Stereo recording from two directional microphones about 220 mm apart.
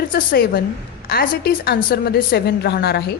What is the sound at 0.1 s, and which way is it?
A woman's voice, 40° left (ahead or behind).